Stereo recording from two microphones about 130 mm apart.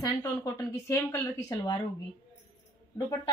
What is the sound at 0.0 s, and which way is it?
A woman's voice, 20° left (ahead or behind).